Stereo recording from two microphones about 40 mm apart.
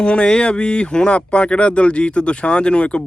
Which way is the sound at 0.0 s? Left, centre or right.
Left.